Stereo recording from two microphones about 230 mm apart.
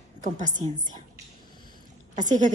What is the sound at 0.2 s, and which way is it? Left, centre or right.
Speech, right.